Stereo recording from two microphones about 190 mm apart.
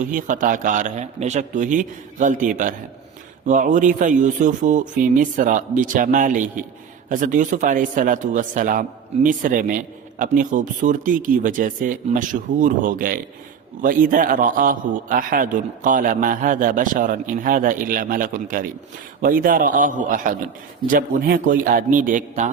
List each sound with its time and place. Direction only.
0.0 s speech: 45° right (ahead or behind)